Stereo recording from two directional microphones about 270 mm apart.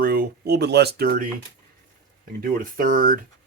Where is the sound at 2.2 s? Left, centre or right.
Right.